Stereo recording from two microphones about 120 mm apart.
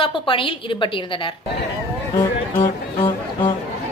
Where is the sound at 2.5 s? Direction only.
50° left (ahead or behind).